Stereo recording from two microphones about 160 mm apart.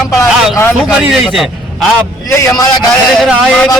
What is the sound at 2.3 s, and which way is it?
Speech, 20° left (ahead or behind).